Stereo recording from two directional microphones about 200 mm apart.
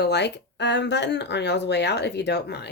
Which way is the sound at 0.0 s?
60° left (ahead or behind).